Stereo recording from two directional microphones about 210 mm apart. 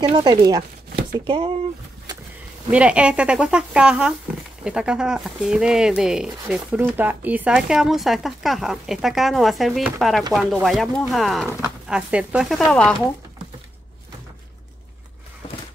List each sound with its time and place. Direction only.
0.0 s speech: 20° right (ahead or behind)
2.7 s speech: 5° right (ahead or behind)